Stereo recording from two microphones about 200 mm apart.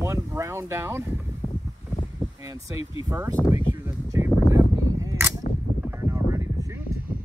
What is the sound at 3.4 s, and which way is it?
Speech, 10° left (ahead or behind).